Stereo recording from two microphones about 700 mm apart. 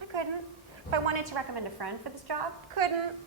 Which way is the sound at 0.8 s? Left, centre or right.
Right.